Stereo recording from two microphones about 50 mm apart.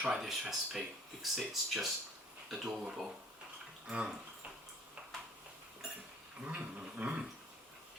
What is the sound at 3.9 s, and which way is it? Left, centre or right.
Speech, centre.